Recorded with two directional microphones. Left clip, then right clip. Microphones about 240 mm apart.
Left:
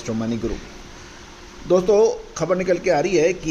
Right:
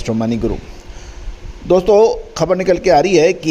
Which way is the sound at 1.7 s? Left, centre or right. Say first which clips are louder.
Right 6 dB; right.